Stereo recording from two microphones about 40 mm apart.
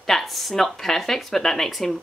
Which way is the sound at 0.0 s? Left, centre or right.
Centre.